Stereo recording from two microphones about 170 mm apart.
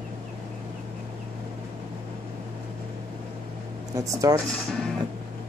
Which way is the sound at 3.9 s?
20° right (ahead or behind).